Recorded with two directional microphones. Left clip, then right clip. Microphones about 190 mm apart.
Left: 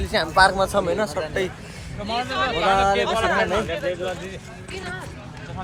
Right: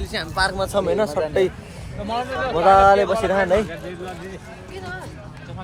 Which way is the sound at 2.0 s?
50° right (ahead or behind).